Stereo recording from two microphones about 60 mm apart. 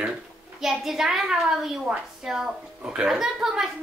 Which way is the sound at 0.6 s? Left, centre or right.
Centre.